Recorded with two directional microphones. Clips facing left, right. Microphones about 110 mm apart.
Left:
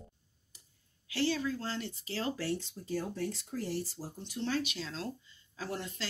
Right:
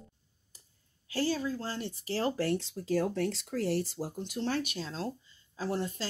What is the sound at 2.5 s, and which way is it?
Speech, 90° right.